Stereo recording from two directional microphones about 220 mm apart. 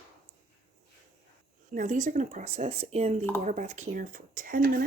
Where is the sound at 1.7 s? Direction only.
35° right (ahead or behind).